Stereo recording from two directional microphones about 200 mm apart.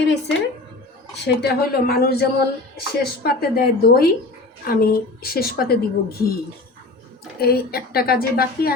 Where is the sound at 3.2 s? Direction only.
50° left (ahead or behind).